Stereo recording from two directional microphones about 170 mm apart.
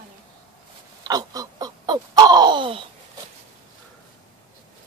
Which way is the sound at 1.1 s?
20° right (ahead or behind).